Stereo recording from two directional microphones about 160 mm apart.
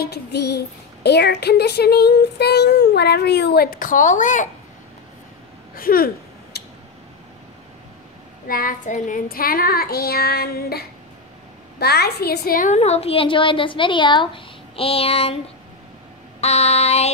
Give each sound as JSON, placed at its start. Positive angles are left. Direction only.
{"t": 0.0, "sound": "speech", "side_deg": 90}
{"t": 5.8, "sound": "a sound", "side_deg": 65}
{"t": 8.5, "sound": "child singing", "side_deg": 60}
{"t": 11.8, "sound": "a woman's voice", "side_deg": 90}
{"t": 16.3, "sound": "child singing", "side_deg": 40}